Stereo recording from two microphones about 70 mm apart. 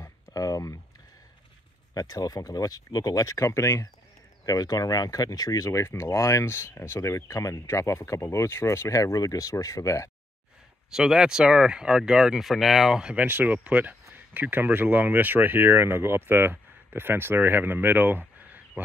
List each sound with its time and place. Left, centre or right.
0.0 s a sound: left
2.0 s speech: left
4.5 s speech: left
10.9 s speech: centre
13.2 s speech: right